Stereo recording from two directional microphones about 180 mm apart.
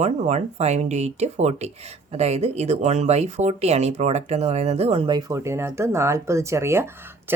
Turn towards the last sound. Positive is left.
turn(degrees=-15)  # may be behind; listen again after turning